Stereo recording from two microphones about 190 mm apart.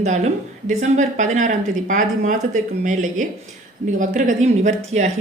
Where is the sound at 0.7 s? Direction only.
40° right (ahead or behind).